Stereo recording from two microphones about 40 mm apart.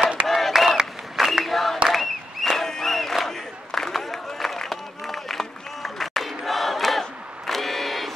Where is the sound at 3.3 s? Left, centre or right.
Centre.